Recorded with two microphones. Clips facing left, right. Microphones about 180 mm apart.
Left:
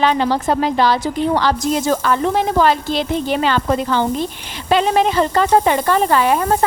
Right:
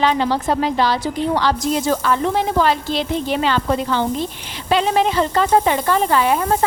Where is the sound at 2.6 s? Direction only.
50° left (ahead or behind).